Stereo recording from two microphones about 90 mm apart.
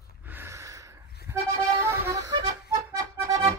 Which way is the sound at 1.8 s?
30° right (ahead or behind).